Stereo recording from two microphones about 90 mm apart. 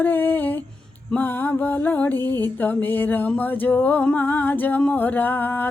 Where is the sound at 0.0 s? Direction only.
20° left (ahead or behind).